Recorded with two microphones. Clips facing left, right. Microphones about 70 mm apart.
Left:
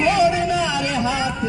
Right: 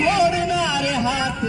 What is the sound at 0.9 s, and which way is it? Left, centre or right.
Speech, centre.